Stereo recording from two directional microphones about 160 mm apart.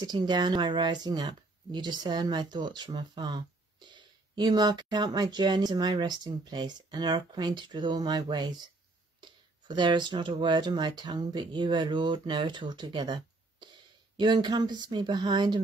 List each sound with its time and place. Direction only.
0.0 s speech: 25° right (ahead or behind)